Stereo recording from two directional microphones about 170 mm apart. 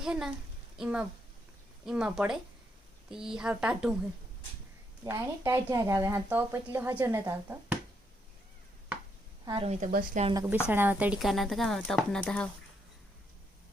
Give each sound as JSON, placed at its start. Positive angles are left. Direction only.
{"t": 0.0, "sound": "a child's voice", "side_deg": -5}
{"t": 5.0, "sound": "a woman's voice", "side_deg": -15}
{"t": 9.5, "sound": "a woman's voice", "side_deg": -30}
{"t": 9.8, "sound": "speech", "side_deg": -45}
{"t": 10.3, "sound": "a woman's voice", "side_deg": -15}